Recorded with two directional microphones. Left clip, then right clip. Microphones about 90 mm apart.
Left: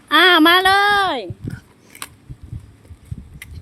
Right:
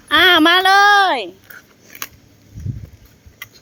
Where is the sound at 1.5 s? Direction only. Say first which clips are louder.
Right 2 dB; 50° right (ahead or behind).